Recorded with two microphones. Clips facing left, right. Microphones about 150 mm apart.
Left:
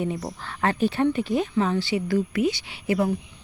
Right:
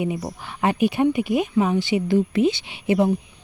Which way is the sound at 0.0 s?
10° right (ahead or behind).